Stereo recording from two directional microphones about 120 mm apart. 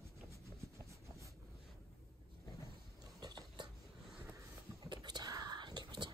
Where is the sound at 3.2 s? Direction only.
35° right (ahead or behind).